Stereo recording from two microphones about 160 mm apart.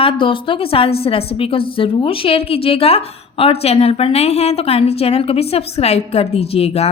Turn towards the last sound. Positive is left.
turn(degrees=40)  # may be behind; listen again after turning